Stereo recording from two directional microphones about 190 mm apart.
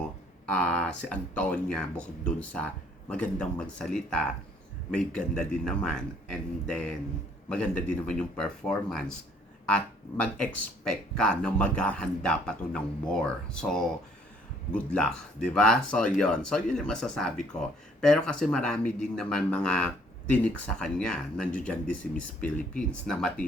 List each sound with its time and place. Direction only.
0.5 s speech: 5° left (ahead or behind)
10.3 s speech: 5° left (ahead or behind)
14.9 s speech: 5° left (ahead or behind)